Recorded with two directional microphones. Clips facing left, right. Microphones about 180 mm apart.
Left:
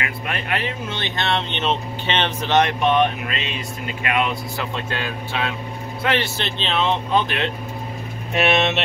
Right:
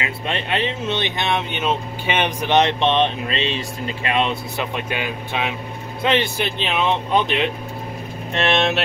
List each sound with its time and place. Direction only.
0.0 s speech: 25° right (ahead or behind)
8.3 s speech: 5° left (ahead or behind)